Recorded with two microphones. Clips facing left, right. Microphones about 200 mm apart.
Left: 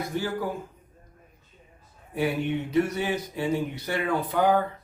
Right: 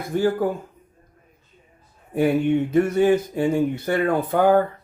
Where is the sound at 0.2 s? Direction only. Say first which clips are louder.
Right 11 dB; 50° right (ahead or behind).